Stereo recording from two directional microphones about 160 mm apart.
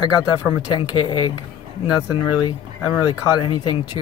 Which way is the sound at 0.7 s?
30° left (ahead or behind).